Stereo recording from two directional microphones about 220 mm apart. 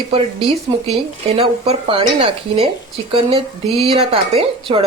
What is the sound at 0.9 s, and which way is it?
Speech, 30° right (ahead or behind).